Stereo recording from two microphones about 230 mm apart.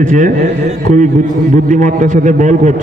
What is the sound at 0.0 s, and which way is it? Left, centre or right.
A man's voice, right.